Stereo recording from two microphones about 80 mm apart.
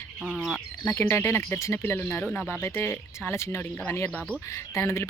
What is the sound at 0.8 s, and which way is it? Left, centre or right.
Speech, left.